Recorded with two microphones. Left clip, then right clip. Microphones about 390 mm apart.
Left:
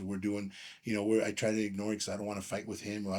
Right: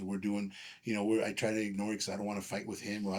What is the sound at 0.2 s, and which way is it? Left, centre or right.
Speech, left.